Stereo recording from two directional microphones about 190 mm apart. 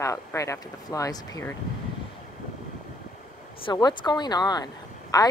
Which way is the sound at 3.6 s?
20° left (ahead or behind).